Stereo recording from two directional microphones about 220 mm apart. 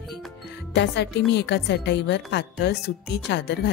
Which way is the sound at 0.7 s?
50° left (ahead or behind).